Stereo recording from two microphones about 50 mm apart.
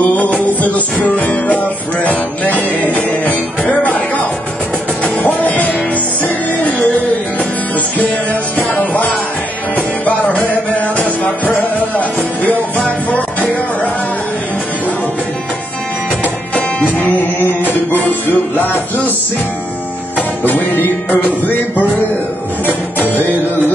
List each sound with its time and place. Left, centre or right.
0.0 s music: left
5.0 s music: centre
8.5 s music: left
10.0 s music: left
12.0 s music: left
17.9 s music: left
20.2 s music: left